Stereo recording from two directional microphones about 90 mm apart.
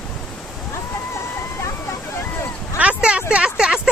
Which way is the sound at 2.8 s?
10° right (ahead or behind).